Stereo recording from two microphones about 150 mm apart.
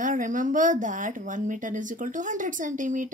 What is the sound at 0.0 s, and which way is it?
A woman's voice, 60° right (ahead or behind).